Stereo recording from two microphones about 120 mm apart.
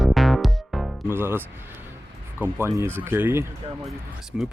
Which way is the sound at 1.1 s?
20° right (ahead or behind).